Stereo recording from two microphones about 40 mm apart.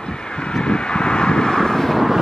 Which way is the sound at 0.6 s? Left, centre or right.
Left.